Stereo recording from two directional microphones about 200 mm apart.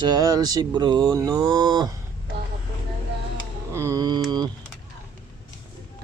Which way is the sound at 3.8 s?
15° right (ahead or behind).